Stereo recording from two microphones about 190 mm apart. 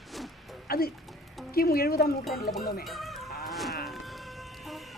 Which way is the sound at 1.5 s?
55° left (ahead or behind).